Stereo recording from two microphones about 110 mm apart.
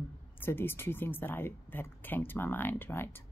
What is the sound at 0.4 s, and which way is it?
A woman's voice, 20° left (ahead or behind).